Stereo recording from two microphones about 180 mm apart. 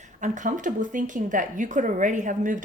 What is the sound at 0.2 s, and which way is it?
Speech, 45° right (ahead or behind).